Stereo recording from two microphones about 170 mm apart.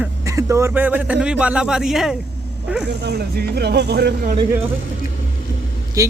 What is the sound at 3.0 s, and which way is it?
Speech, 75° right (ahead or behind).